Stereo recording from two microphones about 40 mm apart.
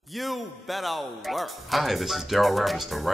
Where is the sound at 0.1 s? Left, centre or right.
Centre.